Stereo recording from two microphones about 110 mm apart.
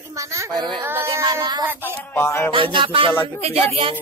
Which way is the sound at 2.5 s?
50° right (ahead or behind).